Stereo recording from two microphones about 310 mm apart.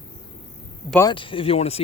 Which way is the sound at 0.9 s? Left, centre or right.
Centre.